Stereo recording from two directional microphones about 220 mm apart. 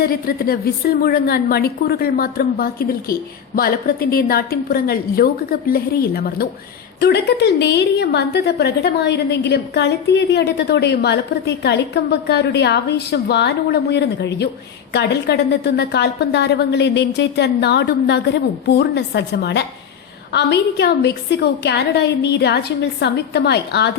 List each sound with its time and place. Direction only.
0.0 s a woman's voice: 45° left (ahead or behind)